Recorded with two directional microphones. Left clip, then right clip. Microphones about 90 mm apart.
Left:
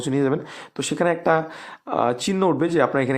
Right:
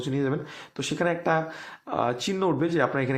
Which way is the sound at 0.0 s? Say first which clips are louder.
Left 6 dB; 50° left (ahead or behind).